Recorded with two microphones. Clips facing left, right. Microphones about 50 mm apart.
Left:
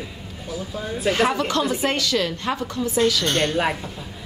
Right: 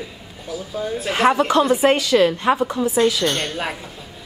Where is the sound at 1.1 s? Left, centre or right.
Centre.